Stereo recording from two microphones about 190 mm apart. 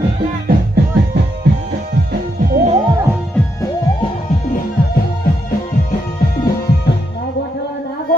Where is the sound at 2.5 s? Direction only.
35° right (ahead or behind).